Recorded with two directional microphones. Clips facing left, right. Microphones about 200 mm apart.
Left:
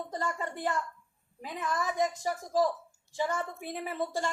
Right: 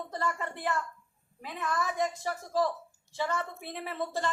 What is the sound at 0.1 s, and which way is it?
A woman's voice, 15° left (ahead or behind).